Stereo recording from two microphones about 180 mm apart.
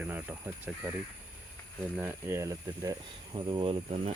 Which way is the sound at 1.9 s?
10° right (ahead or behind).